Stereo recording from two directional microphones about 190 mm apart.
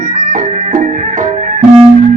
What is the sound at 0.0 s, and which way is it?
Music, 45° right (ahead or behind).